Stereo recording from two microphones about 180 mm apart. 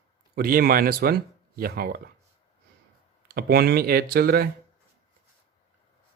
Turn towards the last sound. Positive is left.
turn(degrees=-55)  # may be behind; listen again after turning